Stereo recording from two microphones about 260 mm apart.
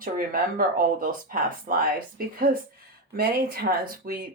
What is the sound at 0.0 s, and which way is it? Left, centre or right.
Speech, right.